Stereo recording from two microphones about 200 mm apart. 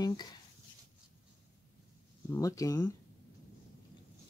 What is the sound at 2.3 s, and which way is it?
Speech, 15° left (ahead or behind).